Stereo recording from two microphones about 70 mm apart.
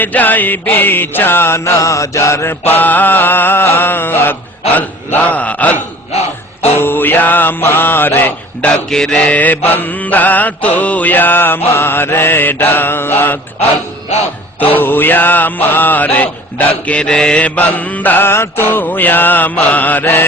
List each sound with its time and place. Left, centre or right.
0.0 s mantra: left
6.7 s mantra: left
8.7 s mantra: centre; by 13.4 s left
14.6 s mantra: left